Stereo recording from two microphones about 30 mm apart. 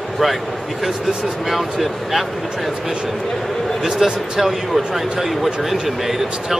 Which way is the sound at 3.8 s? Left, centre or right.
Centre.